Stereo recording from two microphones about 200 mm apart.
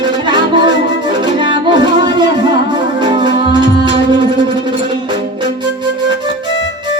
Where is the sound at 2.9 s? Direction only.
20° right (ahead or behind).